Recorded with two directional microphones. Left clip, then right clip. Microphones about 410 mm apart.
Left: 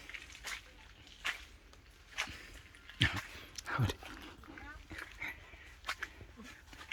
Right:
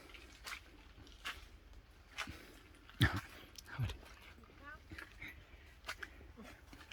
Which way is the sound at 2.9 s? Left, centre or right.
Centre.